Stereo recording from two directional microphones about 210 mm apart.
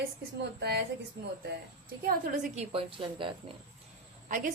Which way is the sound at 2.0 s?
40° right (ahead or behind).